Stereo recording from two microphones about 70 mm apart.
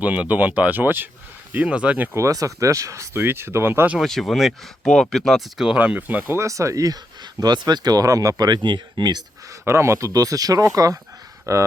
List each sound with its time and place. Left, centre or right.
0.0 s speech: right
1.6 s speech: centre
2.1 s speech: right
3.2 s speech: right
4.0 s speech: centre
5.6 s speech: centre
6.3 s speech: right
8.4 s speech: right
9.5 s speech: right